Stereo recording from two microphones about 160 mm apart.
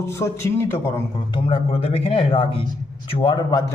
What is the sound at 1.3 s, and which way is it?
Speech, 35° left (ahead or behind).